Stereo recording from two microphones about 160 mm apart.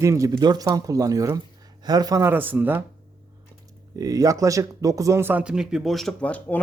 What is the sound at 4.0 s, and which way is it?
A man's voice, 20° right (ahead or behind).